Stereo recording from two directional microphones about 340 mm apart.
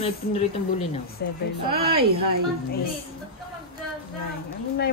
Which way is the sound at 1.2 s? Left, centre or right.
Left.